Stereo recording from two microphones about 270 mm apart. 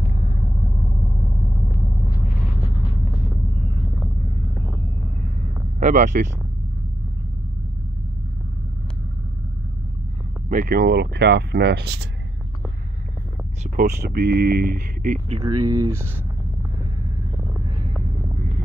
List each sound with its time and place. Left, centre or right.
5.8 s speech: right
10.5 s speech: right
13.7 s speech: right; by 15.6 s centre
15.6 s speech: right